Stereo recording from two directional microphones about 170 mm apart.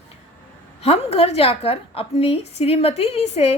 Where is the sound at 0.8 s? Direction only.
35° left (ahead or behind).